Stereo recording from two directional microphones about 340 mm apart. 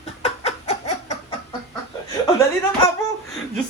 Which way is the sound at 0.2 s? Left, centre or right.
Centre.